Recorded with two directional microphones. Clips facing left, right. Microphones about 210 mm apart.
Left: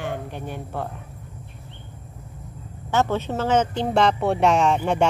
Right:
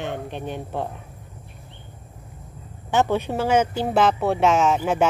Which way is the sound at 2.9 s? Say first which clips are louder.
Right 1 dB; 15° right (ahead or behind).